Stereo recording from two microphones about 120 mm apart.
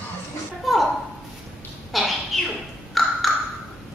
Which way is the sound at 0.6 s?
Centre (ahead or behind).